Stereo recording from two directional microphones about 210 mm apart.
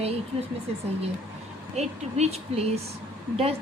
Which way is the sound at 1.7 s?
30° right (ahead or behind).